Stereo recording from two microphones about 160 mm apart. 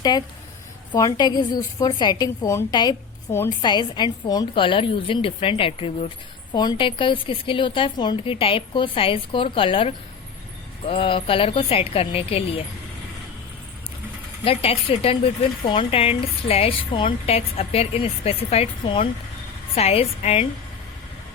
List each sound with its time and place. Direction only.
0.9 s a woman's voice: 25° left (ahead or behind)
14.4 s speech: 40° left (ahead or behind)